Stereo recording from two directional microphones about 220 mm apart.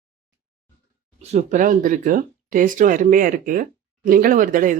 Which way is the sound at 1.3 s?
35° right (ahead or behind).